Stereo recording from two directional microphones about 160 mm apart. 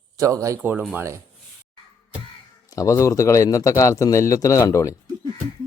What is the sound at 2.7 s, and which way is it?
Speech, 20° left (ahead or behind).